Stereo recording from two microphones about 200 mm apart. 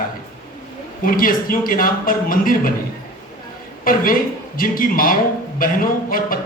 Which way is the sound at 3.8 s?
45° left (ahead or behind).